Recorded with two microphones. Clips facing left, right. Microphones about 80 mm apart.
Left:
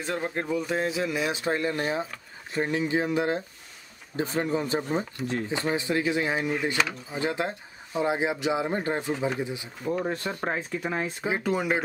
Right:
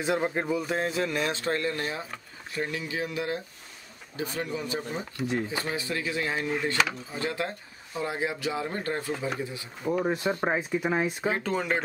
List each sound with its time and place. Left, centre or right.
0.0 s speech: centre; by 5.0 s left
5.5 s speech: left
9.8 s speech: centre
11.2 s speech: centre